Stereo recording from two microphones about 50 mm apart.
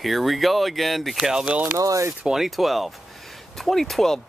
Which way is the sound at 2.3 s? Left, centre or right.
Centre.